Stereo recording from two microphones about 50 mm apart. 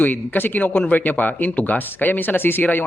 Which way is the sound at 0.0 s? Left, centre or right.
Left.